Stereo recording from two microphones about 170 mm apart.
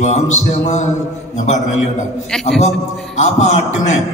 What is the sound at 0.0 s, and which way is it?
Speech, 40° left (ahead or behind).